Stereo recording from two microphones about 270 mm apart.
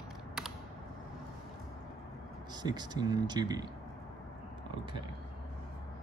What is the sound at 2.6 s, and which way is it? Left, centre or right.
Speech, centre.